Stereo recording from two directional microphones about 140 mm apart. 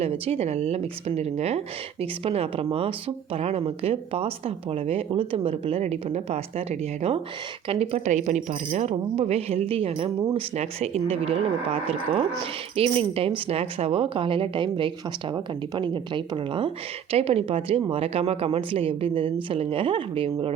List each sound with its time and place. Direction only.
0.0 s speech: 50° right (ahead or behind)